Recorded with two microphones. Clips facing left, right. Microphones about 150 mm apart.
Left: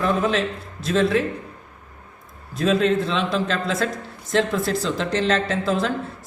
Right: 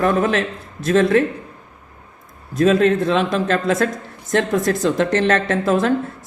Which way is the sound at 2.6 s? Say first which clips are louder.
Right 5 dB; 50° right (ahead or behind).